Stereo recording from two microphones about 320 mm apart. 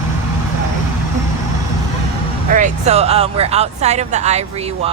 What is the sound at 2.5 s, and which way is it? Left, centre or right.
Speech, right.